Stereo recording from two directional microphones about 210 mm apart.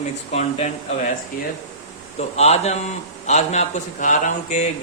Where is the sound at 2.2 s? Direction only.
30° left (ahead or behind).